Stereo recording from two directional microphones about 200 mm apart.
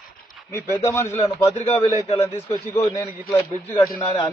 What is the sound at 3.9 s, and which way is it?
Speech, 15° left (ahead or behind).